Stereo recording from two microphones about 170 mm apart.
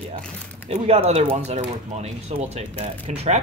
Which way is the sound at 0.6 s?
40° right (ahead or behind).